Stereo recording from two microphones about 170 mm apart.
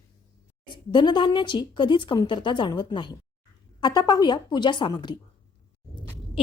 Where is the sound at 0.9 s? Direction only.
25° left (ahead or behind).